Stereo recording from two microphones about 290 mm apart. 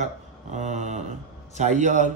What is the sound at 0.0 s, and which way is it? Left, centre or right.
Mantra, right.